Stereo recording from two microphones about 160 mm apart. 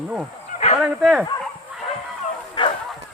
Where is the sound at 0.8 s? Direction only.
5° right (ahead or behind).